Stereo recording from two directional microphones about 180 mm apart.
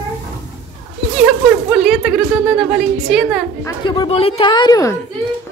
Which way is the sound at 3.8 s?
25° left (ahead or behind).